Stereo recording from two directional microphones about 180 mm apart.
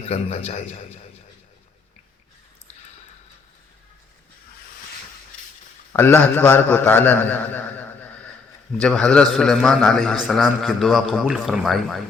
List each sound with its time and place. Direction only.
0.0 s a man's voice: 35° left (ahead or behind)
5.9 s a man's voice: 15° left (ahead or behind)